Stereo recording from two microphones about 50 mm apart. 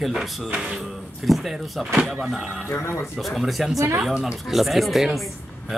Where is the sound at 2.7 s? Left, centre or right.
Left.